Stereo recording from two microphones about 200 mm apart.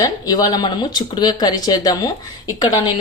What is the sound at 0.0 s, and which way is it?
A woman's voice, 20° left (ahead or behind).